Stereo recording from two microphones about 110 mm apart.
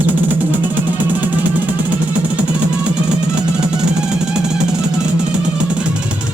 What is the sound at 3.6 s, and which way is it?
Drum, 5° right (ahead or behind).